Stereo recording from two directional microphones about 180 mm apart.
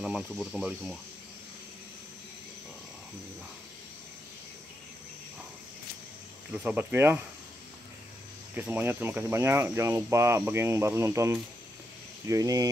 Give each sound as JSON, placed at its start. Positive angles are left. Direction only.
{"t": 0.0, "sound": "speech", "side_deg": 0}
{"t": 6.5, "sound": "speech", "side_deg": -5}
{"t": 8.5, "sound": "speech", "side_deg": -10}